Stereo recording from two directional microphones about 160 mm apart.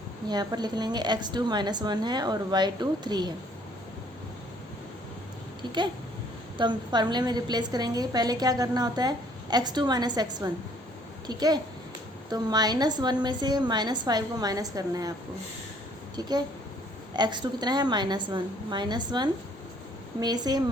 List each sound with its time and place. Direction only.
0.3 s a woman's voice: 25° right (ahead or behind)
5.6 s a woman's voice: 25° right (ahead or behind)
17.2 s a woman's voice: 25° right (ahead or behind)